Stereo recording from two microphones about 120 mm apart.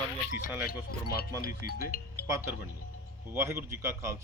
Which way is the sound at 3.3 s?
20° right (ahead or behind).